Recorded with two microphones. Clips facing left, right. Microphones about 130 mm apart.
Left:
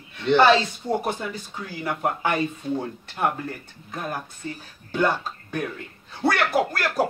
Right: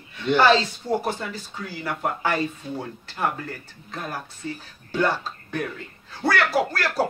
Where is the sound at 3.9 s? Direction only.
15° left (ahead or behind).